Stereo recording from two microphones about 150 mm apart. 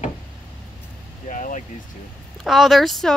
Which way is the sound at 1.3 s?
55° left (ahead or behind).